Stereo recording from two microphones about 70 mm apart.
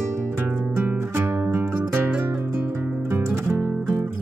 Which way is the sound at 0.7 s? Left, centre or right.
Right.